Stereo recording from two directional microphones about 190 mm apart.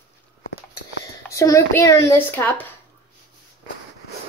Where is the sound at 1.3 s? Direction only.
15° left (ahead or behind).